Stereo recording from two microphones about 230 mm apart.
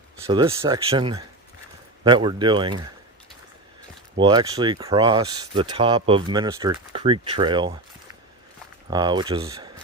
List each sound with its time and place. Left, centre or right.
0.3 s speech: centre
4.2 s speech: right
8.9 s speech: centre